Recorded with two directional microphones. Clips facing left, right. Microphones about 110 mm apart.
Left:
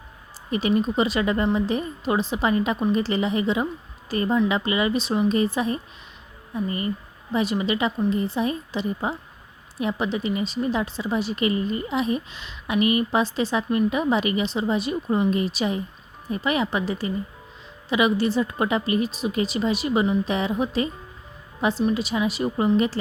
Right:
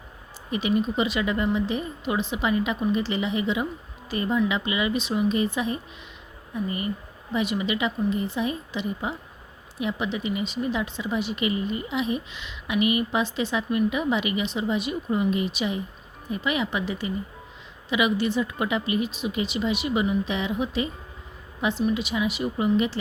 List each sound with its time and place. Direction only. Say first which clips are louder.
0.5 s speech: left 2 dB; 35° left (ahead or behind)